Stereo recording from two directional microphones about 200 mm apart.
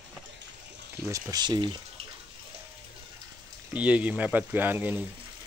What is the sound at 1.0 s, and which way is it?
Speech, 15° right (ahead or behind).